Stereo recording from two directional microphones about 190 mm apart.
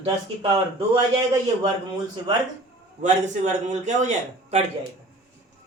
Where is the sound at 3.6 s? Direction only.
40° right (ahead or behind).